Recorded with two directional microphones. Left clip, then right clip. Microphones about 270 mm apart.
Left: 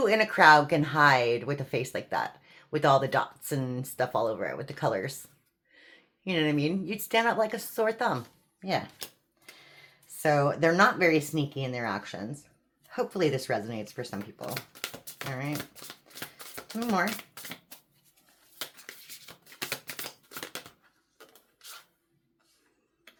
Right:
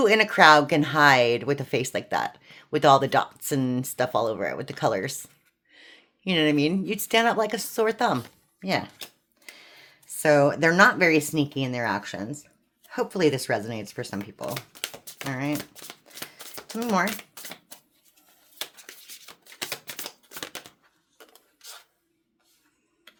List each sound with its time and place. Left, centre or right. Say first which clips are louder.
0.0 s speech: right 4 dB; right
10.2 s speech: right 6 dB; right
14.4 s typing: right 4 dB; right
15.3 s speech: right 6 dB; right
15.7 s shuffling cards: right 3 dB; right
17.3 s shuffling cards: right 2 dB; centre
18.9 s shuffling cards: right 2 dB; right